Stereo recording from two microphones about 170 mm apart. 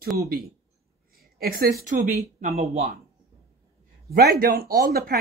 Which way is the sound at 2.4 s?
40° right (ahead or behind).